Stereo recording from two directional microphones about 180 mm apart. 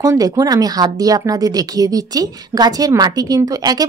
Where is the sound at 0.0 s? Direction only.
20° right (ahead or behind).